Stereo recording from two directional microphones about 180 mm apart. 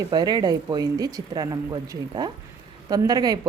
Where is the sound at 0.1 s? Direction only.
20° right (ahead or behind).